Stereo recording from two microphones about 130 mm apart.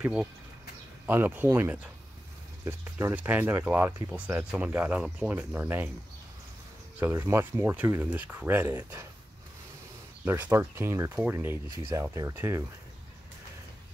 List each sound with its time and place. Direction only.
0.0 s speech: 10° right (ahead or behind)
7.0 s speech: 20° right (ahead or behind)
10.2 s speech: 15° right (ahead or behind)